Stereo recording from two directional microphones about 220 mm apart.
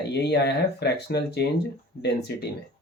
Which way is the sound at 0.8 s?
45° left (ahead or behind).